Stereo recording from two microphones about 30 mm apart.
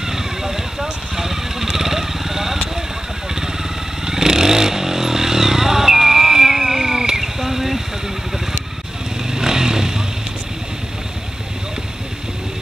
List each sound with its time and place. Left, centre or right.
0.0 s vehicle: centre
4.0 s motorcycle: centre
7.2 s insect: centre
9.3 s motorcycle: right